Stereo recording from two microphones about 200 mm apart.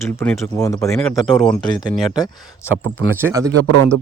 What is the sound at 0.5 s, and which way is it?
Speech, 15° left (ahead or behind).